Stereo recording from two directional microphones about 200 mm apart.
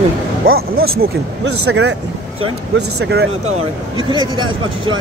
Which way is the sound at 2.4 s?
90° right.